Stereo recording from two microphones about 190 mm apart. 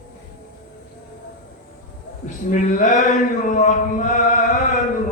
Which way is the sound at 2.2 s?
45° left (ahead or behind).